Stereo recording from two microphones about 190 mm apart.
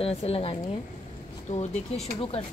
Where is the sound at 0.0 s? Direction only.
30° left (ahead or behind).